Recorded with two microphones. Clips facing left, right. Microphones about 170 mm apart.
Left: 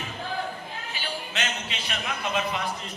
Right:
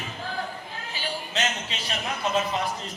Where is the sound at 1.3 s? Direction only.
35° right (ahead or behind).